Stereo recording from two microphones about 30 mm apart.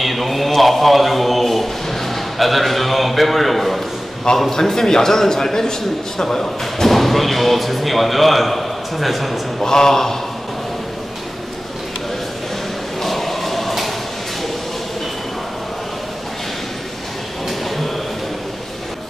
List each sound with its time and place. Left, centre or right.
0.0 s a man's voice: centre
4.4 s a man's voice: centre
9.6 s a man's voice: centre
13.0 s choir: centre
17.5 s a sound: centre